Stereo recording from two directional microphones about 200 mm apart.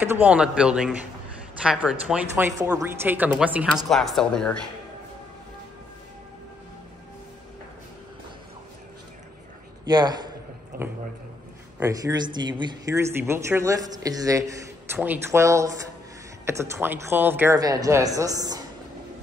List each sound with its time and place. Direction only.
0.0 s speech: 10° right (ahead or behind)
9.8 s speech: 20° right (ahead or behind)
11.8 s a woman's voice: 20° right (ahead or behind)